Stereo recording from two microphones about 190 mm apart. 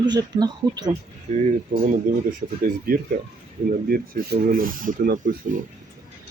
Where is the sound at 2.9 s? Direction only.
50° right (ahead or behind).